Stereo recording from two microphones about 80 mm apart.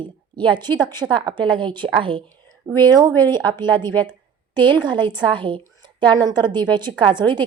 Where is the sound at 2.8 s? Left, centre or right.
Right.